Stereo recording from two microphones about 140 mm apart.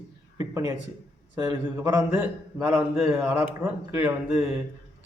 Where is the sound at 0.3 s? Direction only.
25° right (ahead or behind).